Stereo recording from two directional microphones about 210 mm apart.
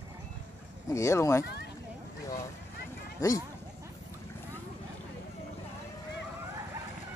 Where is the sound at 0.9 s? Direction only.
15° left (ahead or behind).